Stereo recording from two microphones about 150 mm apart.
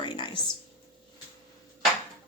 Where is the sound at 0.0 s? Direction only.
35° left (ahead or behind).